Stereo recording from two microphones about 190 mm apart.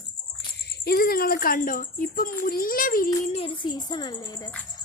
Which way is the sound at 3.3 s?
25° left (ahead or behind).